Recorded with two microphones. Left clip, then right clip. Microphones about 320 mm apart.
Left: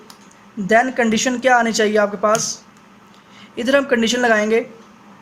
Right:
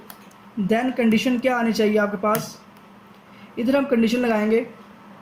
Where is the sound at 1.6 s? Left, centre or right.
Left.